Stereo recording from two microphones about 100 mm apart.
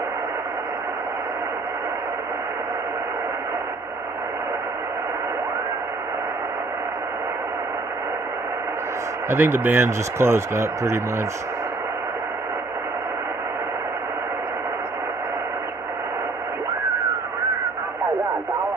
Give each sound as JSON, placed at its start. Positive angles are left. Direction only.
{"t": 9.3, "sound": "speech", "side_deg": -20}